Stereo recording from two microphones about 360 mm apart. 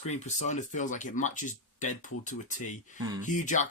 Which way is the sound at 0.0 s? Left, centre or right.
Centre.